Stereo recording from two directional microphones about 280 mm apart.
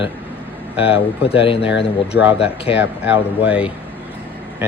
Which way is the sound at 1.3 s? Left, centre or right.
Centre.